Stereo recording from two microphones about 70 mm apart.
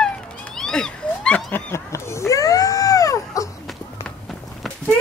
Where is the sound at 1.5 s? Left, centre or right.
Left.